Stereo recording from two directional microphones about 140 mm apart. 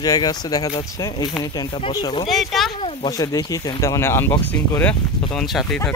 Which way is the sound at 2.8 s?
40° left (ahead or behind).